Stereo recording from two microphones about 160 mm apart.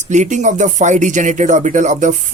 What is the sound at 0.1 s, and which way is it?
Speech, 50° right (ahead or behind).